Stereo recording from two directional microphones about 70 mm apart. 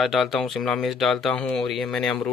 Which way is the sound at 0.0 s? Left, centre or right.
Centre.